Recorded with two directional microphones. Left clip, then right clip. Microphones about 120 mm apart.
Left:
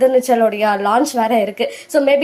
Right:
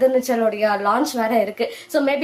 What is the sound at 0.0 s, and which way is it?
A woman's voice, 30° left (ahead or behind).